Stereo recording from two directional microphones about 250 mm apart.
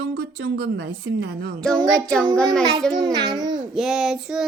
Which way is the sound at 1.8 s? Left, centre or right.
Centre.